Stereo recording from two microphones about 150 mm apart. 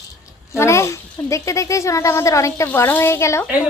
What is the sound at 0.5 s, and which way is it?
A woman's voice, 20° left (ahead or behind).